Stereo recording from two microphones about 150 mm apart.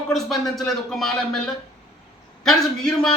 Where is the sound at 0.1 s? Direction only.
Centre (ahead or behind).